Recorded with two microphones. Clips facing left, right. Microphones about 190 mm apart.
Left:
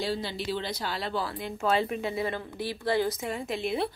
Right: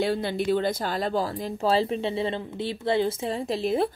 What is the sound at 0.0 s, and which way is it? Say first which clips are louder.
Speech: right 6 dB; 55° right (ahead or behind).